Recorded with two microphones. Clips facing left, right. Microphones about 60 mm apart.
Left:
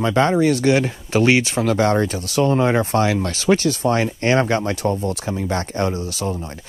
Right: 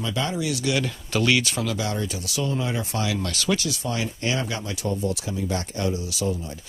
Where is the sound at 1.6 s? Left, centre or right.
Left.